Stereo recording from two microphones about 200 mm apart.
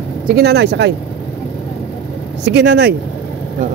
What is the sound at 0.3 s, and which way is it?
Speech, 55° right (ahead or behind).